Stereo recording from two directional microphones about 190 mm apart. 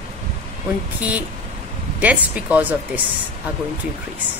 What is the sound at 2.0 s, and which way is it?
Speech, 5° right (ahead or behind).